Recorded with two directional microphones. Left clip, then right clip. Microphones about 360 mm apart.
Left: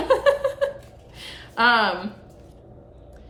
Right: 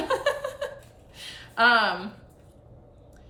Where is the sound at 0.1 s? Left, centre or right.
Centre.